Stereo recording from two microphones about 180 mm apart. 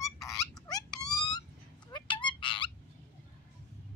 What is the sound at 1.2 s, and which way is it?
Owl, 20° left (ahead or behind).